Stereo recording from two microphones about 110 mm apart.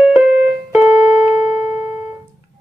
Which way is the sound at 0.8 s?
15° right (ahead or behind).